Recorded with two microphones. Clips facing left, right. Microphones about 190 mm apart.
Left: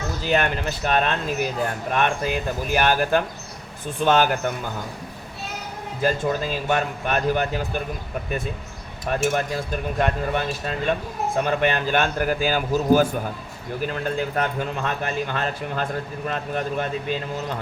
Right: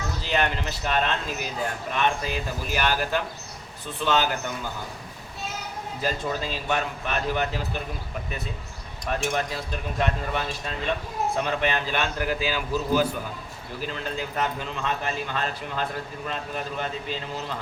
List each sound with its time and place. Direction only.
0.3 s speech: 50° left (ahead or behind)
6.0 s speech: 50° left (ahead or behind)
9.1 s speech: 50° left (ahead or behind)